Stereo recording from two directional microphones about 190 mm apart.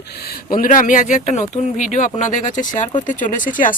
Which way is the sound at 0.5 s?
45° left (ahead or behind).